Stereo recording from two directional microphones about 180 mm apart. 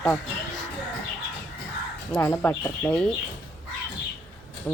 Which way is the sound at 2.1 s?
10° left (ahead or behind).